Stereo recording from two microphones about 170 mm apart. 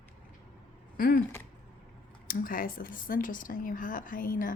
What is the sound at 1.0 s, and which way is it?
Speech, 60° left (ahead or behind).